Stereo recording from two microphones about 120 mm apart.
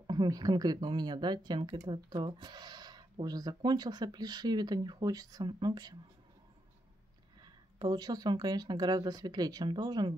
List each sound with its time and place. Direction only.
0.0 s speech: 35° right (ahead or behind)
7.4 s speech: 35° right (ahead or behind)